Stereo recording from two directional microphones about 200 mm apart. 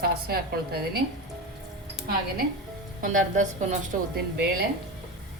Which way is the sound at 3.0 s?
40° right (ahead or behind).